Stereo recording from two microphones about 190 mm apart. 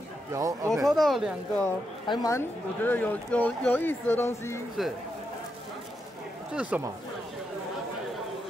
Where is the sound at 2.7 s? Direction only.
10° left (ahead or behind).